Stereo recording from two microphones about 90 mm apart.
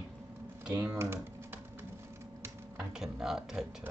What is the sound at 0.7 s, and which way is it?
Speech, 30° right (ahead or behind).